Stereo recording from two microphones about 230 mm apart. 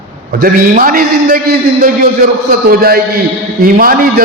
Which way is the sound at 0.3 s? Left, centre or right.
Right.